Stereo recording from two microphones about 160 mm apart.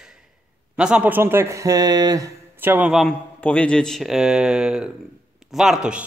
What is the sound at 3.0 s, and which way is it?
A man's voice, 10° left (ahead or behind).